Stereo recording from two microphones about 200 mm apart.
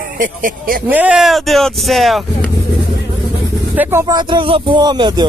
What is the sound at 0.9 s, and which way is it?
Speech, 5° right (ahead or behind).